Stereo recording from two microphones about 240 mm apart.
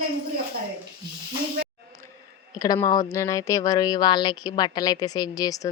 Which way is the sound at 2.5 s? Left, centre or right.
Centre.